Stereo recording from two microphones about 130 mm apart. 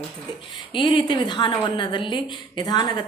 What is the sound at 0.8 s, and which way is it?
A woman's voice, 40° left (ahead or behind).